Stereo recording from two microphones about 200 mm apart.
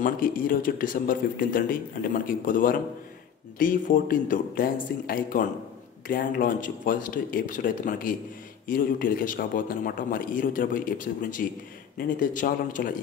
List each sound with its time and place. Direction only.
0.0 s speech: 45° left (ahead or behind)